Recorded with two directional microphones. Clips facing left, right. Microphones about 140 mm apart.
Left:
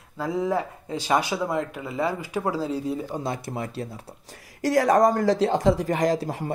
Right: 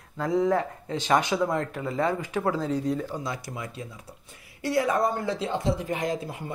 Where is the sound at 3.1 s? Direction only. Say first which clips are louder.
Left 3 dB; 25° left (ahead or behind).